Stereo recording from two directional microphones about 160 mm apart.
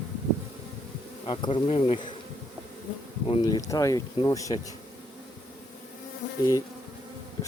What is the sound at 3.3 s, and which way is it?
Speech, 25° left (ahead or behind).